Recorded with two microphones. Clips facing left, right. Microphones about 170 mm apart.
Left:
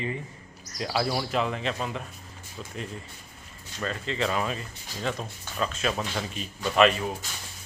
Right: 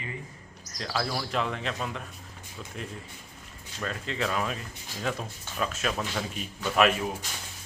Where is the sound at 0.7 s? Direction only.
10° left (ahead or behind).